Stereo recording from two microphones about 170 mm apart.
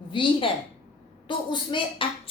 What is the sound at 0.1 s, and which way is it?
A woman's voice, 30° left (ahead or behind).